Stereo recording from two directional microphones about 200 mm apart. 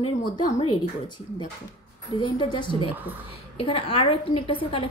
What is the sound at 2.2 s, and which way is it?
A woman's voice, 25° left (ahead or behind).